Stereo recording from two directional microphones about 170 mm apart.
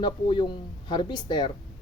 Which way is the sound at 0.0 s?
25° left (ahead or behind).